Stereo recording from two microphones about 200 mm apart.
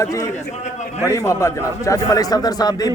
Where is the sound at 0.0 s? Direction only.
15° left (ahead or behind).